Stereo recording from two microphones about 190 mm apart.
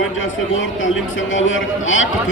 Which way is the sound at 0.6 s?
90° left.